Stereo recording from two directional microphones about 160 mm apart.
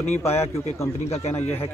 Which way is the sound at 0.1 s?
15° left (ahead or behind).